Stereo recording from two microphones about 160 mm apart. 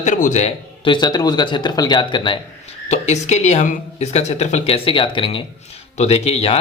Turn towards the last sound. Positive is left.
turn(degrees=40)  # may be behind; listen again after turning